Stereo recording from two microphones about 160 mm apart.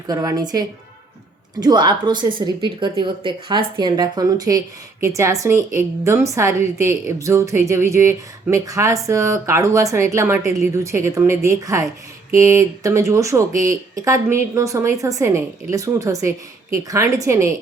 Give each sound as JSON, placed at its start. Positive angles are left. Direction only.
{"t": 0.1, "sound": "a woman's voice", "side_deg": -25}